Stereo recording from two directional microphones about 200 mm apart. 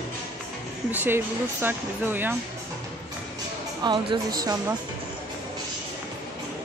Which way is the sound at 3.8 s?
20° right (ahead or behind).